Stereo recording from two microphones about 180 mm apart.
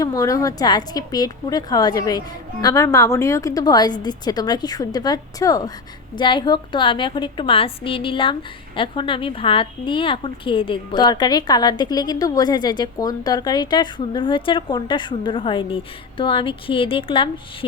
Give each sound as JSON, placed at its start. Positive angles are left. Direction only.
{"t": 0.0, "sound": "a woman's voice", "side_deg": 20}